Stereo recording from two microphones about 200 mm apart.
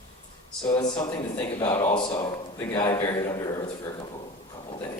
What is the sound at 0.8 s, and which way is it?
A man's voice, 20° left (ahead or behind).